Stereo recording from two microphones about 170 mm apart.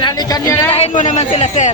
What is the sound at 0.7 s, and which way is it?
Speech, 40° left (ahead or behind).